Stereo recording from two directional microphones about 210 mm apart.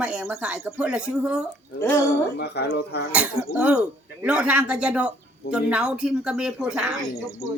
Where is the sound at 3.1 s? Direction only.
5° right (ahead or behind).